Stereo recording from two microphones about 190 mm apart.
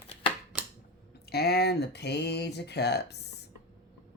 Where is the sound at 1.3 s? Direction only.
55° left (ahead or behind).